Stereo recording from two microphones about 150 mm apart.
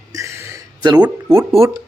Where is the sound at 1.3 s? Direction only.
40° right (ahead or behind).